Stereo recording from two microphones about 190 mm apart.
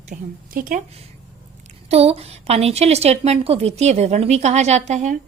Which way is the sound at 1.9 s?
30° right (ahead or behind).